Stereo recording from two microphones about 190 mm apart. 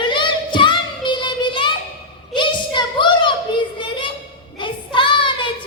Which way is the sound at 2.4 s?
25° left (ahead or behind).